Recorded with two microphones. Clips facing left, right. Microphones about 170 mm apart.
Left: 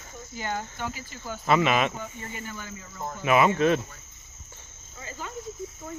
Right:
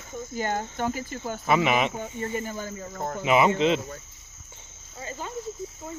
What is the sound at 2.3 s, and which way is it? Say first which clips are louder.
Speech: right 7 dB; 40° right (ahead or behind).